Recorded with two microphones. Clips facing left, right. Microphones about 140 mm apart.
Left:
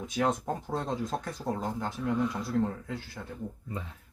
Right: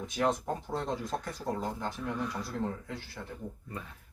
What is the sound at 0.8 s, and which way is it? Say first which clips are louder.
Speech: left 2 dB; 20° left (ahead or behind).